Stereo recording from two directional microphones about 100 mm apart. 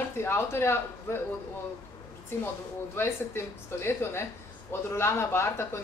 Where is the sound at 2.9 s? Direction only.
25° left (ahead or behind).